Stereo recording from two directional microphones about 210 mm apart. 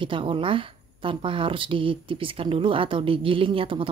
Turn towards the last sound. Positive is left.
turn(degrees=-25)  # may be behind; listen again after turning